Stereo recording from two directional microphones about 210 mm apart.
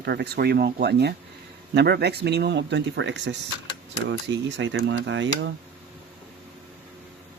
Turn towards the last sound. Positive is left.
turn(degrees=-60)  # may be behind; listen again after turning